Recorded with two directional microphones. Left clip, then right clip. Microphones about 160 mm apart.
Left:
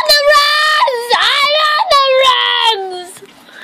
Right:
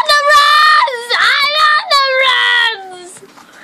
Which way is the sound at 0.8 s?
Centre (ahead or behind).